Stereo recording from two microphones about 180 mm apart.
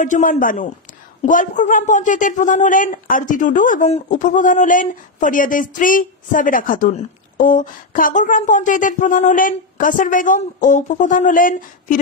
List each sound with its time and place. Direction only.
0.0 s a man's voice: 45° left (ahead or behind)